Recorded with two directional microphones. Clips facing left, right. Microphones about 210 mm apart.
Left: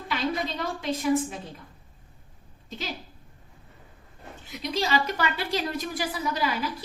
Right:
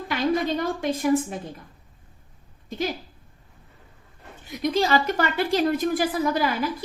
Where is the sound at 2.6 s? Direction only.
50° right (ahead or behind).